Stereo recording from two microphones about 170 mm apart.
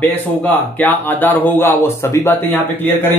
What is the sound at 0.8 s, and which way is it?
Speech, 10° left (ahead or behind).